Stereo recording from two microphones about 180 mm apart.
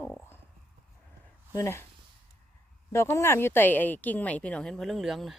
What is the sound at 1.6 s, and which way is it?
Speech, 15° left (ahead or behind).